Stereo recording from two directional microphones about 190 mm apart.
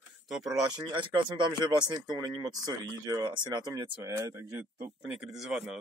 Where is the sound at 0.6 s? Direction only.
25° right (ahead or behind).